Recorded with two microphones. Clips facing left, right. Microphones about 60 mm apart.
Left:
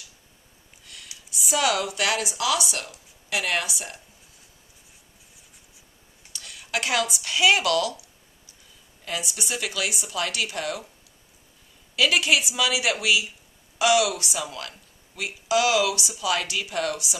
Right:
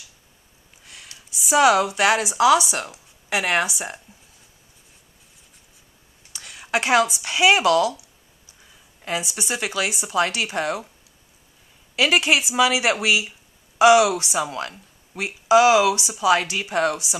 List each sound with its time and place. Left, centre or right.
1.1 s a sound: centre
1.6 s speech: right
6.3 s speech: right
9.0 s speech: right
11.9 s speech: right